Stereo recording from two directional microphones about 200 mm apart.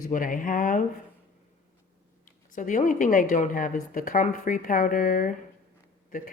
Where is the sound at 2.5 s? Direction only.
40° left (ahead or behind).